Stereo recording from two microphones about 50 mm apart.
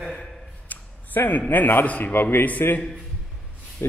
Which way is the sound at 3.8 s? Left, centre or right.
Left.